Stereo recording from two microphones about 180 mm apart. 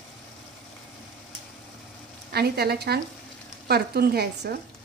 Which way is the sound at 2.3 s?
65° right (ahead or behind).